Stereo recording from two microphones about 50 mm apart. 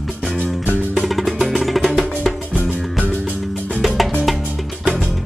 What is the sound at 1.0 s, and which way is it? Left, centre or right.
Music, centre.